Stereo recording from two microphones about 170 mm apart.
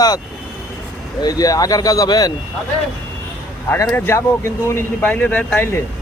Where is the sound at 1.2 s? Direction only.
20° left (ahead or behind).